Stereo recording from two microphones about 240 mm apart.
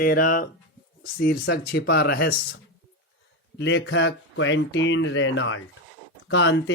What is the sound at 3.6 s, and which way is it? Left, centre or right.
Speech, left.